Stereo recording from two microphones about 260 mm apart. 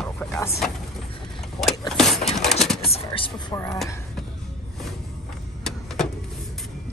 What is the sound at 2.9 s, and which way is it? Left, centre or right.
Speech, left.